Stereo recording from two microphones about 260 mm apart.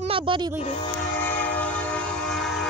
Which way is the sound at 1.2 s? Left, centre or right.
Centre.